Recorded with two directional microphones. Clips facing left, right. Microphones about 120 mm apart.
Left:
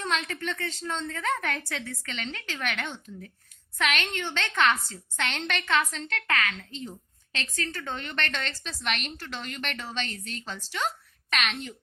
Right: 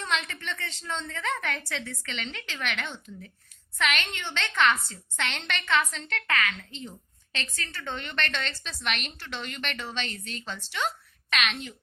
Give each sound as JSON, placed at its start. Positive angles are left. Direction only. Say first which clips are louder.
{"t": 0.1, "sound": "a woman's voice", "louder": "even", "side_deg": 40}